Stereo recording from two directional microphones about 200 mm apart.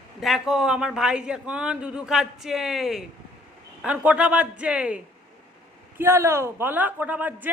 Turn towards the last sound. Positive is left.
turn(degrees=-10)  # may be behind; listen again after turning